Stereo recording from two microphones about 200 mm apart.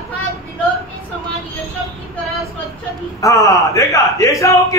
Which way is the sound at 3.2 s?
15° left (ahead or behind).